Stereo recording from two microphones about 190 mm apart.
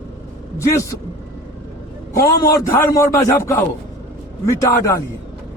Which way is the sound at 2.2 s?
15° left (ahead or behind).